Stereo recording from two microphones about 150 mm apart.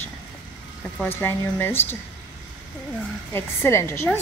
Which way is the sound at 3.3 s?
15° left (ahead or behind).